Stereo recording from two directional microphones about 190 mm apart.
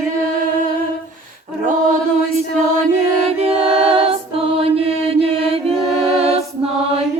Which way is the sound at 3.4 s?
30° right (ahead or behind).